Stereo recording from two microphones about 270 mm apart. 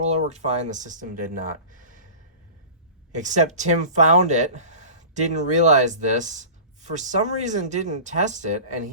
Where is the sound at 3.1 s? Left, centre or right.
Right.